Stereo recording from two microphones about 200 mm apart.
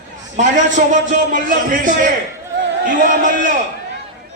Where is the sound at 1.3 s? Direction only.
40° right (ahead or behind).